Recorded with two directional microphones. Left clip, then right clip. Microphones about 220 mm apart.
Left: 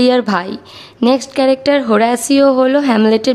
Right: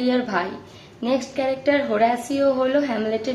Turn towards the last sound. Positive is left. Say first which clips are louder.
# left 10 dB
turn(degrees=55)  # may be behind; listen again after turning